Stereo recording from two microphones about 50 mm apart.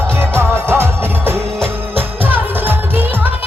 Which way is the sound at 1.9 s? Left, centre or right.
Right.